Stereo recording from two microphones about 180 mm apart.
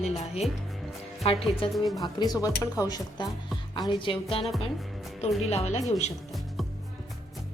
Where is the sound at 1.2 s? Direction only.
35° left (ahead or behind).